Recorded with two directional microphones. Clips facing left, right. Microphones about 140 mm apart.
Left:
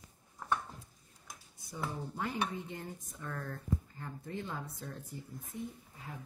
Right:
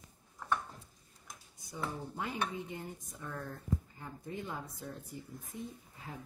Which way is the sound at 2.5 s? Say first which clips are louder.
Even; 20° right (ahead or behind).